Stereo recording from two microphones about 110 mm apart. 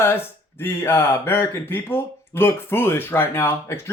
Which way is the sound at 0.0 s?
20° left (ahead or behind).